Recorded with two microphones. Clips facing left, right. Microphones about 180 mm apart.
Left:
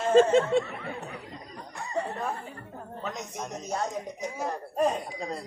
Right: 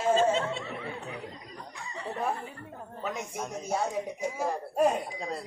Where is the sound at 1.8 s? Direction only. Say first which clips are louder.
Left 12 dB; 50° left (ahead or behind).